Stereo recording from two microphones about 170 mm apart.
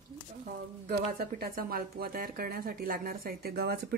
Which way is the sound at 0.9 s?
60° right (ahead or behind).